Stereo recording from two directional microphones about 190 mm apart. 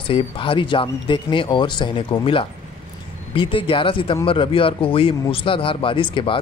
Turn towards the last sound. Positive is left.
turn(degrees=25)  # may be behind; listen again after turning